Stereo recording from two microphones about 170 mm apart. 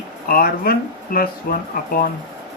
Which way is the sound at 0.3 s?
60° left (ahead or behind).